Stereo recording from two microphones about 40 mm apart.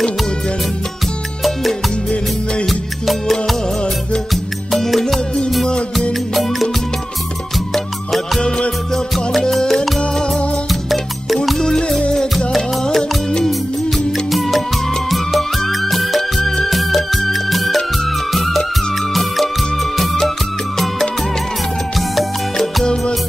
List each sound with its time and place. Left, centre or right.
2.6 s music: centre
8.4 s music: left
9.4 s music: centre
10.7 s music: centre
12.1 s music: centre
13.4 s music: centre
16.3 s music: centre
16.6 s music: centre